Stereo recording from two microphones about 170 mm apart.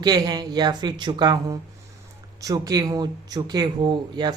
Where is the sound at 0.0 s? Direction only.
25° right (ahead or behind).